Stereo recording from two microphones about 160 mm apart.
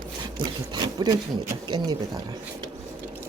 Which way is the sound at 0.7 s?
25° right (ahead or behind).